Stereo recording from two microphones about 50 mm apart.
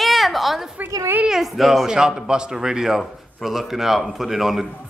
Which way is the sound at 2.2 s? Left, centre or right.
Centre.